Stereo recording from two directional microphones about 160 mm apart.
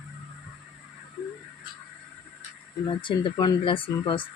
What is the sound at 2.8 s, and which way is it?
A woman's voice, 30° left (ahead or behind).